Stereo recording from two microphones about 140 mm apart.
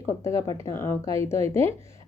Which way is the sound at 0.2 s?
20° left (ahead or behind).